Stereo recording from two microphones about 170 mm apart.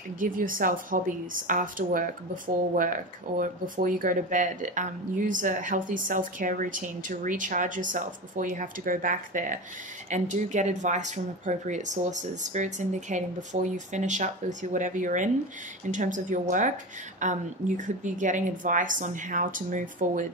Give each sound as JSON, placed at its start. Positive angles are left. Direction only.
{"t": 0.2, "sound": "a woman's voice", "side_deg": -55}